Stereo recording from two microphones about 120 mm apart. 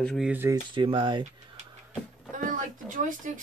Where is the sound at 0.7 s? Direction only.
45° right (ahead or behind).